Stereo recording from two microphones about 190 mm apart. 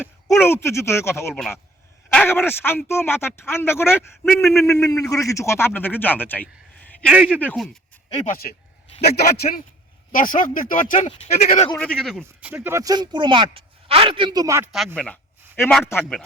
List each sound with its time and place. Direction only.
0.0 s a sound: centre (ahead or behind)
0.4 s speech: 15° left (ahead or behind)
1.3 s speech: centre (ahead or behind)
2.1 s speech: 10° left (ahead or behind)
7.0 s speech: 5° right (ahead or behind)
8.1 s a man's voice: 40° left (ahead or behind)
11.8 s speech: 5° left (ahead or behind)
12.2 s speech: 10° right (ahead or behind)
14.9 s a sound: 5° left (ahead or behind)
15.9 s speech: 10° left (ahead or behind)